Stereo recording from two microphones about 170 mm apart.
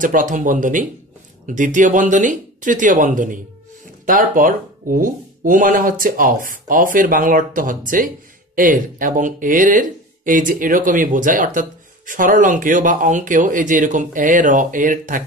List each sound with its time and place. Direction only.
0.0 s speech: 50° right (ahead or behind)